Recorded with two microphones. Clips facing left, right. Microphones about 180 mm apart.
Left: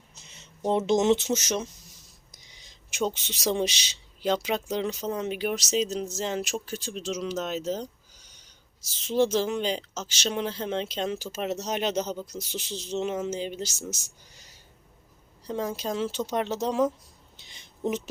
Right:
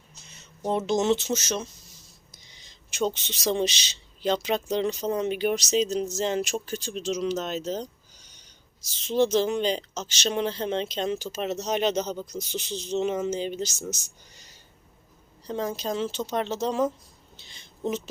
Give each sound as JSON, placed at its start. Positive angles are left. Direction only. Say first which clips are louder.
{"t": 0.1, "sound": "speech", "louder": "right 1 dB", "side_deg": 20}
{"t": 15.4, "sound": "speech", "louder": "right 1 dB", "side_deg": 10}
{"t": 17.3, "sound": "a sound", "louder": "right 3 dB", "side_deg": 15}